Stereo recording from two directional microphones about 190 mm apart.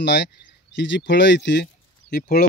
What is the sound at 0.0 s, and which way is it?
Speech, 65° left (ahead or behind).